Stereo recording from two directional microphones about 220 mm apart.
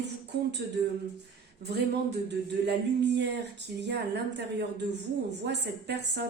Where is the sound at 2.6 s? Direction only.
50° right (ahead or behind).